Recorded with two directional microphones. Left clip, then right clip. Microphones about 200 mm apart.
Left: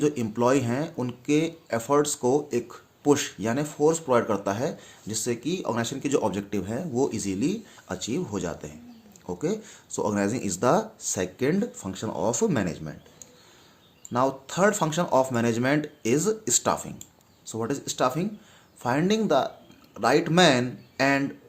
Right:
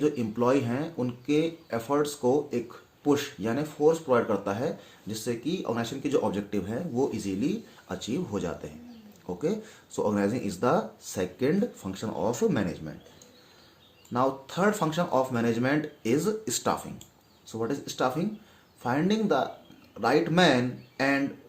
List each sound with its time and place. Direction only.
0.0 s speech: 40° left (ahead or behind)